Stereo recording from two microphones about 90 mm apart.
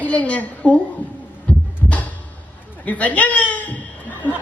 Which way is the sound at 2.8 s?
15° left (ahead or behind).